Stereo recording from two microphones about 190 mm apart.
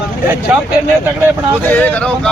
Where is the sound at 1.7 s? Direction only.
10° left (ahead or behind).